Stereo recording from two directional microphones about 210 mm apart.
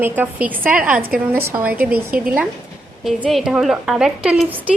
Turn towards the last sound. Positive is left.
turn(degrees=-5)  # may be behind; listen again after turning